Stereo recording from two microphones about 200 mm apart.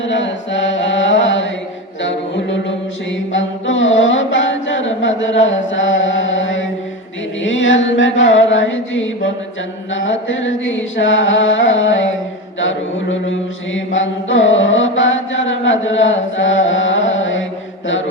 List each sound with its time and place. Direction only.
0.0 s mantra: 65° left (ahead or behind)
2.0 s music: 65° left (ahead or behind)
3.3 s mantra: 70° left (ahead or behind)
7.4 s chant: 70° left (ahead or behind)